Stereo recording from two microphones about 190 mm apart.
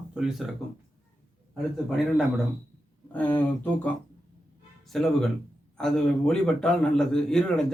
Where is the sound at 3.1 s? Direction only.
10° left (ahead or behind).